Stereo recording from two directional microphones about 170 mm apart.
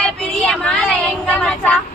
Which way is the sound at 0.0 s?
5° left (ahead or behind).